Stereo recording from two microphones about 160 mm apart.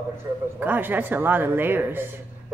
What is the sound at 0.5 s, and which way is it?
Speech, 10° right (ahead or behind).